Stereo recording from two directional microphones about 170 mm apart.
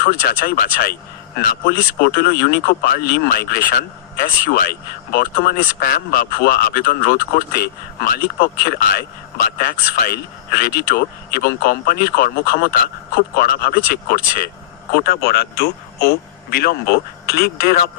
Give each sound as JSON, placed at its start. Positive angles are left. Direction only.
{"t": 0.0, "sound": "speech", "side_deg": 60}